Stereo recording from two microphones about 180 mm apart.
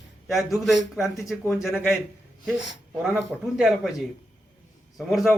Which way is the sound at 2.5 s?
90° left.